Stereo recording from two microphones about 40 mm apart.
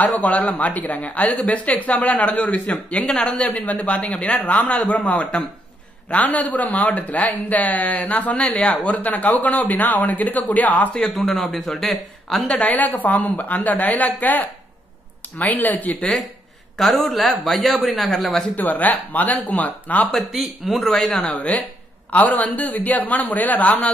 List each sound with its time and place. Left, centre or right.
0.0 s a man's voice: left
11.1 s speech: centre
12.4 s a woman's voice: left
16.7 s speech: centre
18.7 s a woman's voice: left
20.2 s speech: centre
20.8 s speech: centre
21.4 s a woman's voice: left